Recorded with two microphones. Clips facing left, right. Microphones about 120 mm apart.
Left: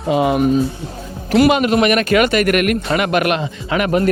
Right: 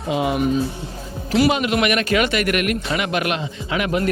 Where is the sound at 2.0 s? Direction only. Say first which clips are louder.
Left 5 dB; 55° left (ahead or behind).